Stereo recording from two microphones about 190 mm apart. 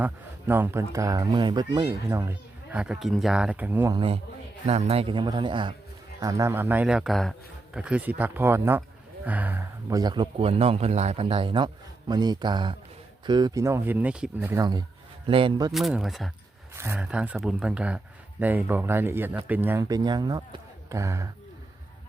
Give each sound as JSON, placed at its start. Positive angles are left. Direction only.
{"t": 0.0, "sound": "speech", "side_deg": -10}
{"t": 3.9, "sound": "speech", "side_deg": -30}
{"t": 14.6, "sound": "speech", "side_deg": -20}
{"t": 15.7, "sound": "speech", "side_deg": 0}
{"t": 16.7, "sound": "speech", "side_deg": -15}